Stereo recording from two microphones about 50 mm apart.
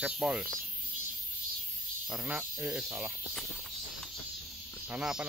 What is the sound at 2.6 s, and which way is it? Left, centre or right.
Speech, centre.